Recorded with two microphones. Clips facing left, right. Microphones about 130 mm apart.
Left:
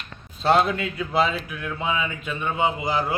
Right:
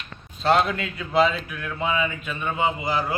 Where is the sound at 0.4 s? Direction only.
20° left (ahead or behind).